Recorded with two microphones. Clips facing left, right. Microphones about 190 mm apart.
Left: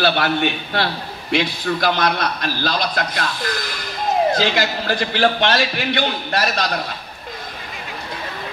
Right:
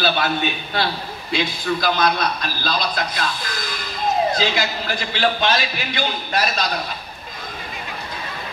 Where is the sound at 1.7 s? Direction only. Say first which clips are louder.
Right 2 dB; 50° left (ahead or behind).